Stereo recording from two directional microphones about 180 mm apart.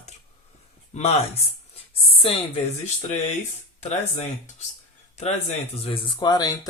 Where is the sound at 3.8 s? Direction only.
40° left (ahead or behind).